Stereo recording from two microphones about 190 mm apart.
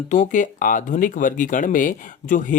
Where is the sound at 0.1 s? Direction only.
40° left (ahead or behind).